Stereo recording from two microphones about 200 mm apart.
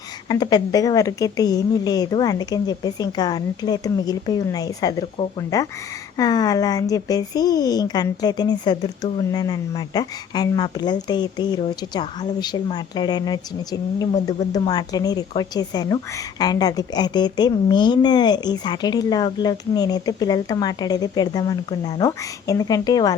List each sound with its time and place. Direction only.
0.3 s a woman's voice: 20° left (ahead or behind)